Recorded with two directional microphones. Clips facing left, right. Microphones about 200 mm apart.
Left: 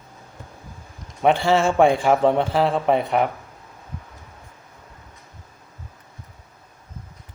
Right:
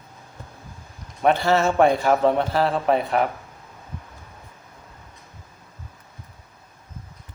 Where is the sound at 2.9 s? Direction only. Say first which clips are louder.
Even; centre (ahead or behind).